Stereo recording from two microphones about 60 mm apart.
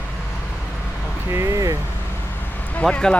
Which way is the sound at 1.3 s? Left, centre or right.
Right.